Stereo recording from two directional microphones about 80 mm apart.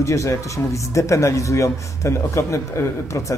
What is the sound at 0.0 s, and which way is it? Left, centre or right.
Speech, left.